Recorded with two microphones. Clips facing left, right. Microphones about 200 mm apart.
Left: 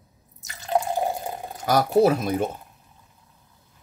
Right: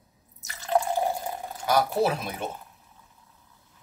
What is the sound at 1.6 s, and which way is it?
Speech, 40° left (ahead or behind).